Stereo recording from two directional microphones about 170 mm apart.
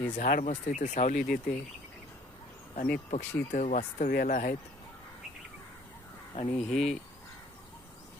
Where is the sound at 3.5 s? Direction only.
45° left (ahead or behind).